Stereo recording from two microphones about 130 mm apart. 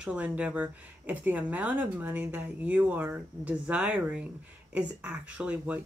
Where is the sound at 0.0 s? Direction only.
10° right (ahead or behind).